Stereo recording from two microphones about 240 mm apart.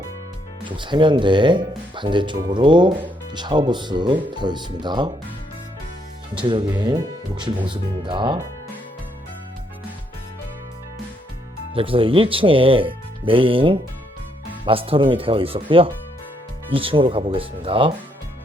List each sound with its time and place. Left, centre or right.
0.8 s speech: centre
6.4 s speech: centre
11.7 s speech: right
16.7 s speech: right